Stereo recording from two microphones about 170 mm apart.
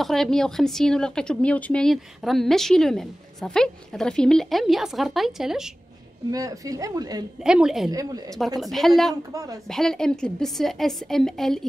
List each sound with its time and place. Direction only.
0.0 s speech: centre (ahead or behind)
6.3 s a woman's voice: 20° right (ahead or behind)
7.4 s speech: 5° right (ahead or behind)
7.9 s a woman's voice: 20° right (ahead or behind)
8.5 s speech: centre (ahead or behind)
9.3 s a woman's voice: 20° right (ahead or behind)
9.7 s speech: 5° left (ahead or behind)